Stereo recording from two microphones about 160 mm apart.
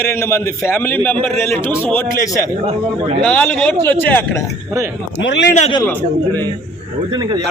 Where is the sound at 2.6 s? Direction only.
35° right (ahead or behind).